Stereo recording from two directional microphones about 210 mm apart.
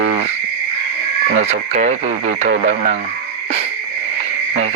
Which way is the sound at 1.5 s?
35° right (ahead or behind).